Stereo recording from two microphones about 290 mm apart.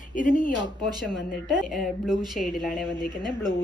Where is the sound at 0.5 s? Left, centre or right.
Centre.